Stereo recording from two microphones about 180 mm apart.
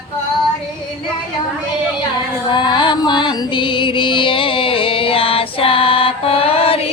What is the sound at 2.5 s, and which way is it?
Music, 25° left (ahead or behind).